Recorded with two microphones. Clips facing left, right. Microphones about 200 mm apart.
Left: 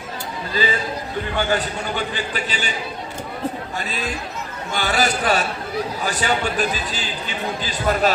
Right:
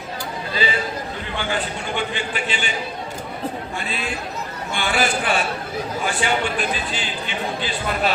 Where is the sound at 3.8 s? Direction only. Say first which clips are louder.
Even; 40° left (ahead or behind).